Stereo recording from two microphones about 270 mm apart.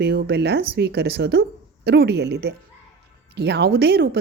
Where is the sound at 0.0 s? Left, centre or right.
Right.